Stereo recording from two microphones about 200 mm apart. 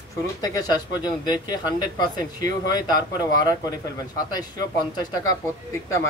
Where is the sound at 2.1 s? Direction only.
20° left (ahead or behind).